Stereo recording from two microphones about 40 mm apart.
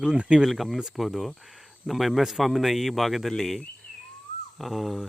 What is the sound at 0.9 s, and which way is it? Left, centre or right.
Speech, centre.